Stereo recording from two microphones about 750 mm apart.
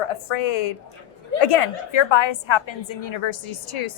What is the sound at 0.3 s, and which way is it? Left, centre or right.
A woman's voice, left.